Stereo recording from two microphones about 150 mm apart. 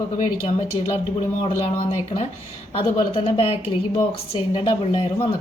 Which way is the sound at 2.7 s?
40° left (ahead or behind).